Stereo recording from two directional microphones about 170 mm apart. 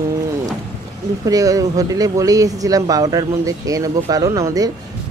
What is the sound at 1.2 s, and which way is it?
Speech, 20° right (ahead or behind).